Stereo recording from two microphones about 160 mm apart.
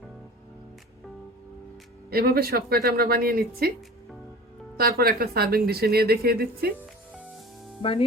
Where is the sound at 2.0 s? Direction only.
70° right (ahead or behind).